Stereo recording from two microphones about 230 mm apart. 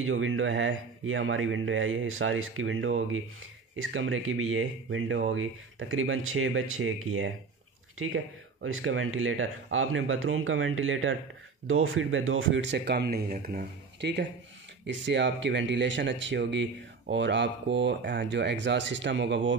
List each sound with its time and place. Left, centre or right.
0.0 s speech: right
8.6 s speech: right